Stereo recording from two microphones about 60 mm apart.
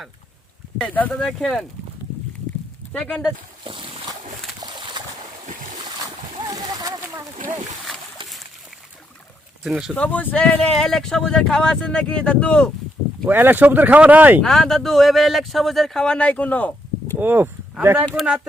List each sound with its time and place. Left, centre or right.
0.9 s speech: left
1.1 s speech: centre
3.0 s speech: centre
4.6 s boat: right
6.5 s a sound: right
7.9 s a sound: centre
9.9 s speech: left
13.2 s speech: right
14.4 s speech: centre; by 16.7 s left
17.2 s speech: right